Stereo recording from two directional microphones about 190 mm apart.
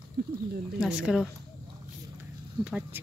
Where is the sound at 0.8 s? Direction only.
5° right (ahead or behind).